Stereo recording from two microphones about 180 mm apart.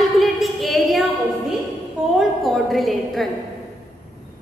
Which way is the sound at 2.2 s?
Centre (ahead or behind).